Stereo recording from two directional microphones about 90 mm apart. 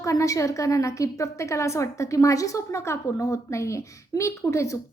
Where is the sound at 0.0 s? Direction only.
35° left (ahead or behind).